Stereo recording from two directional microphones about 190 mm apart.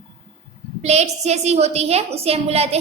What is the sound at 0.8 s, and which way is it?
A woman's voice, 35° right (ahead or behind).